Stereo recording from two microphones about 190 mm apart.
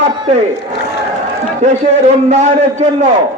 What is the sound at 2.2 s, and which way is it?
Speech, 35° right (ahead or behind).